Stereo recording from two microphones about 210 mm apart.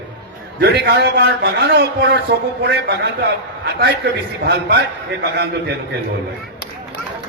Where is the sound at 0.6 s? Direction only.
55° right (ahead or behind).